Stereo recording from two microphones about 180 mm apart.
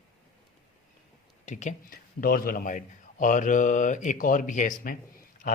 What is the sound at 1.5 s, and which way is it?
A man's voice, 40° left (ahead or behind).